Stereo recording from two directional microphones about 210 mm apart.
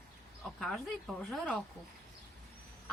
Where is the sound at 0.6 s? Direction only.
Centre (ahead or behind).